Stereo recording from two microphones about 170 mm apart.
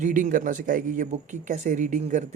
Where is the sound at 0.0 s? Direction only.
50° right (ahead or behind).